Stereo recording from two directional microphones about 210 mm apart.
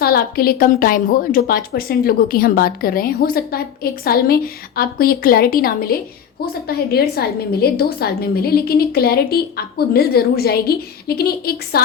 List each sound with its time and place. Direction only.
0.0 s a woman's voice: 45° left (ahead or behind)